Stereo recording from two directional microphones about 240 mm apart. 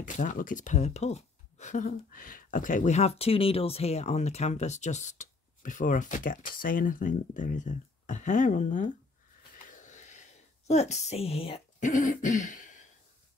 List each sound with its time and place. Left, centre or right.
0.0 s speech: left
9.6 s a sound: left
10.7 s speech: left